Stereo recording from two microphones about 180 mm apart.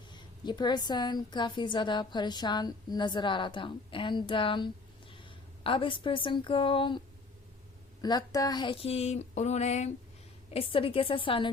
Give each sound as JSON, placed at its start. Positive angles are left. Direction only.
{"t": 0.4, "sound": "a woman's voice", "side_deg": 25}
{"t": 8.0, "sound": "a woman's voice", "side_deg": 20}